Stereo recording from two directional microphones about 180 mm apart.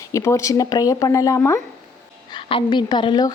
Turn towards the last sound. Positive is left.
turn(degrees=25)  # may be behind; listen again after turning